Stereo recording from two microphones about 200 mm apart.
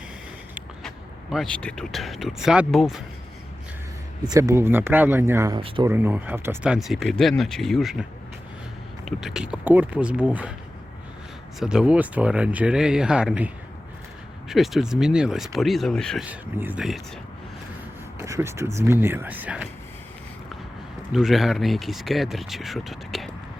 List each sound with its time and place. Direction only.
0.8 s speech: centre (ahead or behind)
4.3 s speech: 15° right (ahead or behind)
5.5 s speech: 25° right (ahead or behind)
5.9 s speech: 10° right (ahead or behind)
9.0 s speech: centre (ahead or behind)
11.6 s speech: 5° right (ahead or behind)
14.5 s speech: centre (ahead or behind)
16.2 s speech: 10° right (ahead or behind)
18.2 s speech: 15° right (ahead or behind)
21.1 s speech: centre (ahead or behind)